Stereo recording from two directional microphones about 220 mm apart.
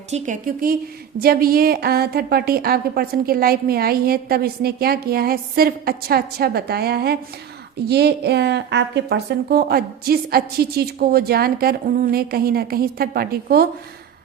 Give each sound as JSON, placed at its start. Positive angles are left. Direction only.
{"t": 0.1, "sound": "a woman's voice", "side_deg": -35}